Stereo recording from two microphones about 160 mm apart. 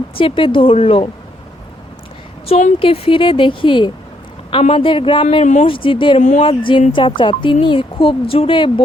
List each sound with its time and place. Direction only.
0.2 s speech: 35° left (ahead or behind)
2.5 s a woman's voice: 45° left (ahead or behind)
2.7 s speech: 35° left (ahead or behind)
5.7 s speech: 35° left (ahead or behind)